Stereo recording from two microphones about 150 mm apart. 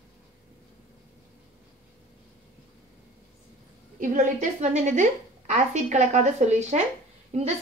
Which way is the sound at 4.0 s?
55° right (ahead or behind).